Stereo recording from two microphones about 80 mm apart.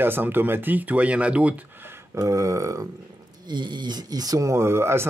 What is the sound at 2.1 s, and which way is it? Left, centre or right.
Speech, right.